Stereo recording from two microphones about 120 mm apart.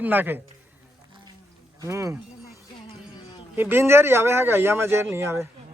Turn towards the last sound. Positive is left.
turn(degrees=-20)  # may be behind; listen again after turning